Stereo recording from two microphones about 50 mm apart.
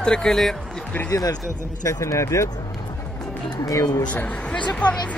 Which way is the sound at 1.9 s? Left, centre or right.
Left.